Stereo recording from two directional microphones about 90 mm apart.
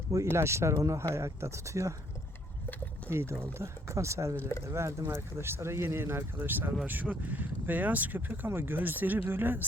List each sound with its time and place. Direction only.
0.1 s speech: 30° right (ahead or behind)
3.1 s speech: 25° right (ahead or behind)